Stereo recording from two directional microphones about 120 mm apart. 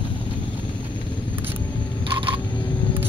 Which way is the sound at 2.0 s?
45° right (ahead or behind).